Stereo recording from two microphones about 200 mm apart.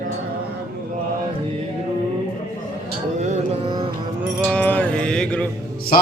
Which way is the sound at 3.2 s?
35° right (ahead or behind).